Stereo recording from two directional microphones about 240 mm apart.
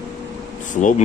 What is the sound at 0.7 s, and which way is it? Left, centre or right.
Speech, left.